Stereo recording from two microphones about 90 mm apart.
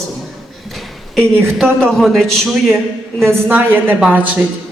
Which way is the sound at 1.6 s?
5° left (ahead or behind).